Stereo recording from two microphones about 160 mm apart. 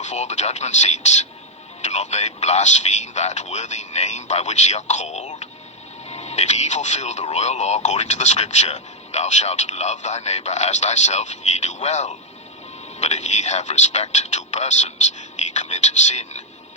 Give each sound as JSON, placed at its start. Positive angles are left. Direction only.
{"t": 0.0, "sound": "speech", "side_deg": 45}